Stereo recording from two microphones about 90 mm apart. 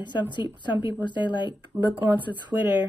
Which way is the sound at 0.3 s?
60° left (ahead or behind).